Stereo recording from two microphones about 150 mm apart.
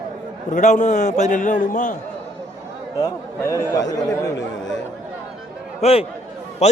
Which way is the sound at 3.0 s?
20° left (ahead or behind).